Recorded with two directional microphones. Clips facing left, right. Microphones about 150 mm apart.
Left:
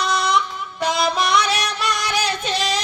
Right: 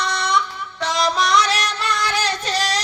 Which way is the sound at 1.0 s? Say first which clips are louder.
Right 2 dB; 10° left (ahead or behind).